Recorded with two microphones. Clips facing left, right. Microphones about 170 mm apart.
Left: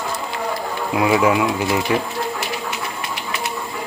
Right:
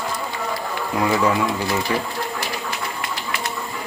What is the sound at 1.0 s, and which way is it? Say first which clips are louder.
Speech: left 3 dB; 10° left (ahead or behind).